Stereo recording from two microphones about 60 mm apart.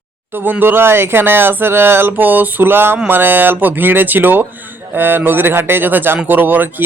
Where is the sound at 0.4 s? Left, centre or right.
Right.